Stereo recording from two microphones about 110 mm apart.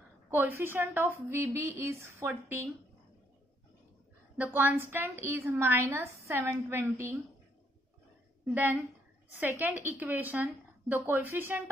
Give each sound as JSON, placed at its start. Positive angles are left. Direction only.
{"t": 0.3, "sound": "a woman's voice", "side_deg": -20}
{"t": 4.4, "sound": "a woman's voice", "side_deg": -15}
{"t": 9.4, "sound": "a woman's voice", "side_deg": -15}